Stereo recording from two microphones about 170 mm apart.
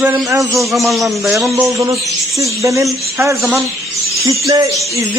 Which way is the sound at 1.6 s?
20° right (ahead or behind).